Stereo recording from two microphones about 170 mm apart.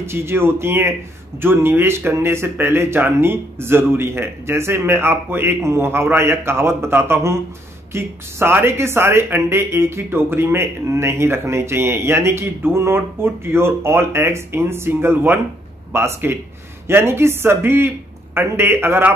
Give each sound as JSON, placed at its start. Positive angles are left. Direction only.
{"t": 0.0, "sound": "speech", "side_deg": -15}